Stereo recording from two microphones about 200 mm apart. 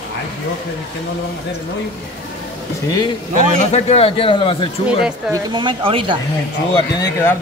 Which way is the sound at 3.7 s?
30° left (ahead or behind).